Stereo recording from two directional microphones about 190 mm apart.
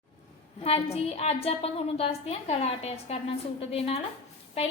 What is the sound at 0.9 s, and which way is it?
A woman's voice, 35° left (ahead or behind).